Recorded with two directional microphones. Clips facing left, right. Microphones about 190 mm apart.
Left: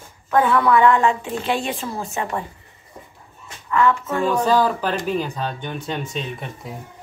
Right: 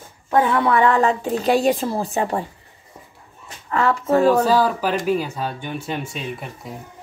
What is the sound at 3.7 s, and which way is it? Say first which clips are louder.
Speech: right 1 dB; 35° right (ahead or behind).